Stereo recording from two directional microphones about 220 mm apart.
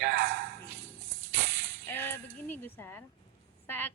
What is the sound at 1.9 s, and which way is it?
A woman's voice, 10° left (ahead or behind).